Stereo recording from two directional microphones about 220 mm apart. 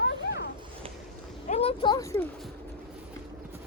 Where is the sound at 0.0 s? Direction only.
50° left (ahead or behind).